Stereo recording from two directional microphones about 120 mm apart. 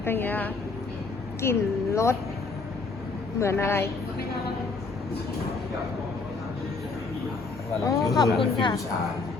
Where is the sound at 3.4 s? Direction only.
20° left (ahead or behind).